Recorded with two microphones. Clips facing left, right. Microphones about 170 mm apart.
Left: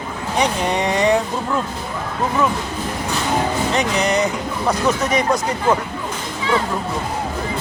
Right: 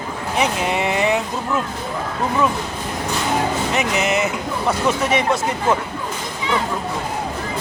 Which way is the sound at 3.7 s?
5° right (ahead or behind).